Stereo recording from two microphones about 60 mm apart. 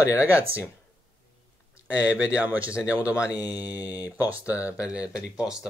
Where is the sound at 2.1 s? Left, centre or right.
Right.